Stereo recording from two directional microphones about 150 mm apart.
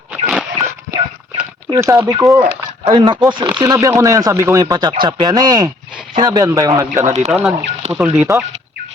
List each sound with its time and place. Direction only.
0.1 s a sound: 5° right (ahead or behind)
1.7 s speech: 20° right (ahead or behind)
2.4 s speech: 40° right (ahead or behind)
7.0 s speech: 45° right (ahead or behind)
7.3 s speech: centre (ahead or behind)
7.6 s speech: 45° right (ahead or behind)
7.9 s speech: 15° right (ahead or behind)